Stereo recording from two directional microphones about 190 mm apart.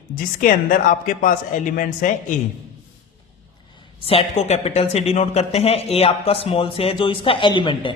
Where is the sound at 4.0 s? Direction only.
30° left (ahead or behind).